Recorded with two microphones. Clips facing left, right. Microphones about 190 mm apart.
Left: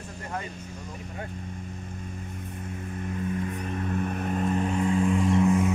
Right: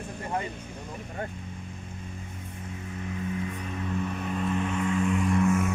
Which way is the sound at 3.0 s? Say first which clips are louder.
Left 2 dB; 50° left (ahead or behind).